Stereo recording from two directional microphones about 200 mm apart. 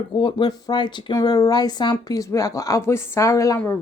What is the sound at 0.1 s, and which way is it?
A woman's voice, 25° left (ahead or behind).